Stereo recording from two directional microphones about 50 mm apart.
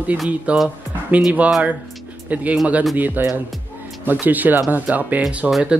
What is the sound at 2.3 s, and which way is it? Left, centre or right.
Speech, right.